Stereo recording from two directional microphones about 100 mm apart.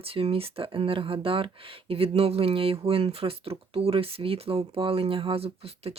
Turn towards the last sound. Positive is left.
turn(degrees=-80)